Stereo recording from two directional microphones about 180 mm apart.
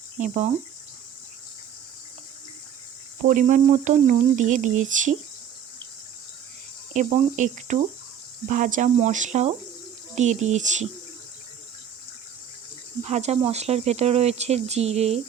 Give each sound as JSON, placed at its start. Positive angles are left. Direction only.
{"t": 0.2, "sound": "speech", "side_deg": -40}
{"t": 3.2, "sound": "speech", "side_deg": -45}
{"t": 6.9, "sound": "speech", "side_deg": -40}
{"t": 13.1, "sound": "speech", "side_deg": -40}